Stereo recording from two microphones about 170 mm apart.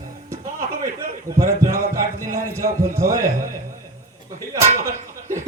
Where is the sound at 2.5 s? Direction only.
15° right (ahead or behind).